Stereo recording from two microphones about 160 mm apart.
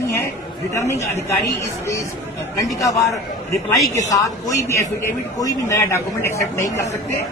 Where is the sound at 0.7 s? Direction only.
20° left (ahead or behind).